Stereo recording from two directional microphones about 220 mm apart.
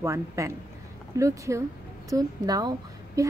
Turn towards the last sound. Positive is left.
turn(degrees=-15)  # may be behind; listen again after turning